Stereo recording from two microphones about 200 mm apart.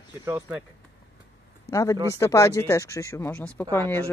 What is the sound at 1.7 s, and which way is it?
Speech, 15° left (ahead or behind).